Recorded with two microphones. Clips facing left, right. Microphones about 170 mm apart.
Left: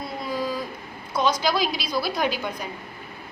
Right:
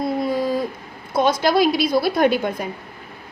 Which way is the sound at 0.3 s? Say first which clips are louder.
Right 7 dB; 55° right (ahead or behind).